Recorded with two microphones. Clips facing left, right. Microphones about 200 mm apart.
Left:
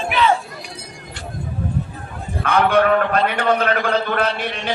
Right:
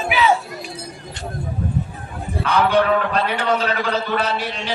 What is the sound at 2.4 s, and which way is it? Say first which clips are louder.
A man's voice: left 1 dB; 55° left (ahead or behind).